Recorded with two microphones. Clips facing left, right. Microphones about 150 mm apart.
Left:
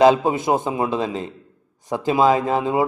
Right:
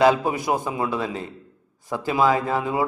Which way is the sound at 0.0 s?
20° left (ahead or behind).